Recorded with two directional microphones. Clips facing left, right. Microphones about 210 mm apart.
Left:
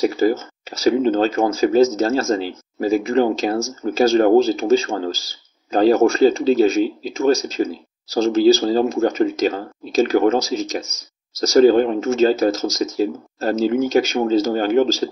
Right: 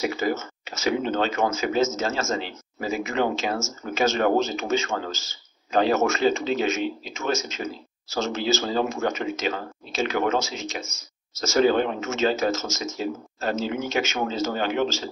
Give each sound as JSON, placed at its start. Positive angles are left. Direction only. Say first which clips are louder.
{"t": 0.0, "sound": "speech", "louder": "left 8 dB", "side_deg": 35}